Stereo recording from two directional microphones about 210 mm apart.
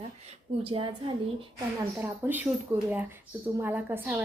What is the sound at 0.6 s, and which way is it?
Speech, 25° right (ahead or behind).